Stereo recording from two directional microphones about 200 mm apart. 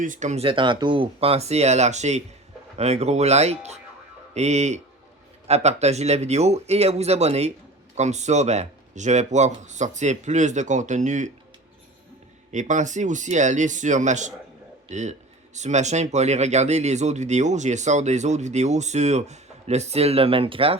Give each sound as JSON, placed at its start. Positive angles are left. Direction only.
{"t": 0.0, "sound": "speech", "side_deg": -40}
{"t": 12.5, "sound": "speech", "side_deg": -35}